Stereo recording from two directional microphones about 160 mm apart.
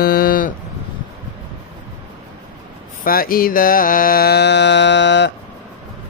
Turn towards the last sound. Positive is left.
turn(degrees=90)